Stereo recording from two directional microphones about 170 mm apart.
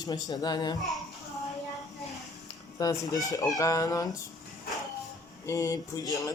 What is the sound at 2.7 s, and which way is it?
Speech, 20° left (ahead or behind).